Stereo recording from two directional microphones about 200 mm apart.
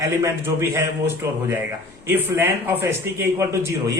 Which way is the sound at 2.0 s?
10° right (ahead or behind).